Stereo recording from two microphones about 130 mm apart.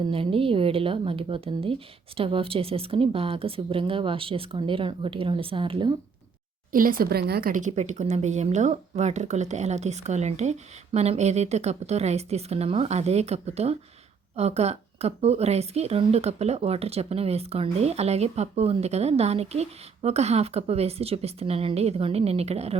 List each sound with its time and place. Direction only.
0.0 s speech: 45° right (ahead or behind)
6.7 s speech: 90° right
7.7 s speech: 65° right (ahead or behind)